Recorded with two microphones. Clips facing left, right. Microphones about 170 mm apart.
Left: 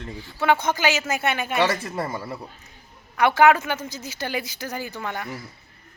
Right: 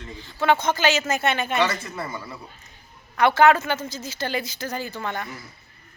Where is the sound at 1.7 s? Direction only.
45° left (ahead or behind).